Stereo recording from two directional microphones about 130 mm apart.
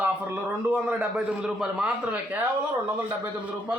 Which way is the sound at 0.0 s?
10° right (ahead or behind).